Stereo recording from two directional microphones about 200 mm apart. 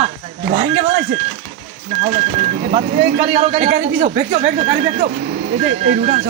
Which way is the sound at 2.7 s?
30° right (ahead or behind).